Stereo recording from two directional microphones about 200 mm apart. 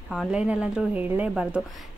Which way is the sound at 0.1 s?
Centre (ahead or behind).